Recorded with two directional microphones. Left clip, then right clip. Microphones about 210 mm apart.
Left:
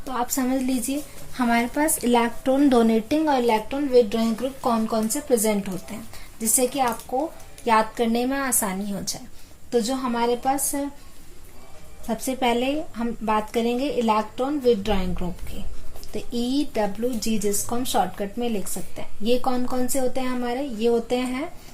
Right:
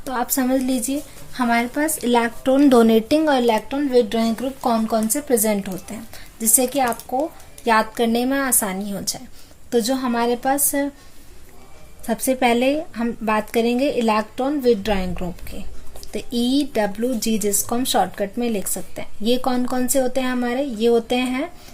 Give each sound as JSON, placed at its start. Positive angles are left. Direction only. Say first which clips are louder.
{"t": 0.0, "sound": "speech", "louder": "right 3 dB", "side_deg": -40}
{"t": 1.3, "sound": "speech", "louder": "right 3 dB", "side_deg": -15}
{"t": 2.4, "sound": "speech", "louder": "right 4 dB", "side_deg": -25}
{"t": 12.0, "sound": "speech", "louder": "right 5 dB", "side_deg": -45}